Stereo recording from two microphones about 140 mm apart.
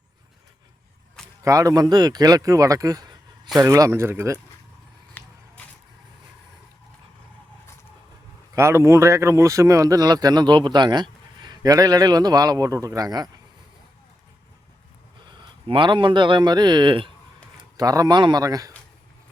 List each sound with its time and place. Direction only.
1.5 s speech: 25° right (ahead or behind)
5.2 s a sound: 10° left (ahead or behind)
8.5 s speech: 20° right (ahead or behind)
15.3 s speech: 35° right (ahead or behind)